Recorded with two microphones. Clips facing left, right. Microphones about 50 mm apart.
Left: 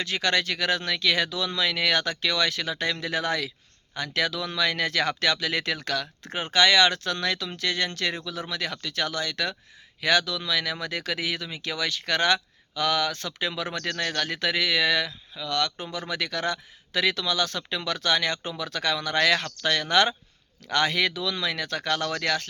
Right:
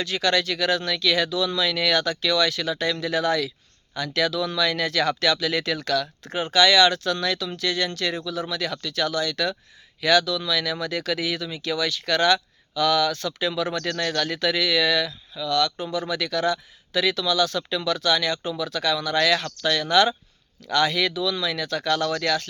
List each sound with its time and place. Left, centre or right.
0.0 s speech: left